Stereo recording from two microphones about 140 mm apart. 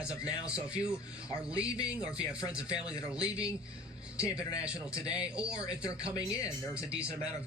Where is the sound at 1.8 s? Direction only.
5° right (ahead or behind).